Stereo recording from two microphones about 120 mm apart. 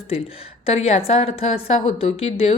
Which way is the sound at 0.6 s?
60° left (ahead or behind).